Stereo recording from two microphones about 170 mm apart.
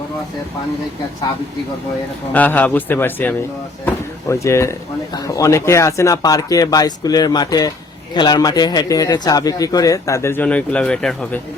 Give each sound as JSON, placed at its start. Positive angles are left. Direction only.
{"t": 2.3, "sound": "a man's voice", "side_deg": 10}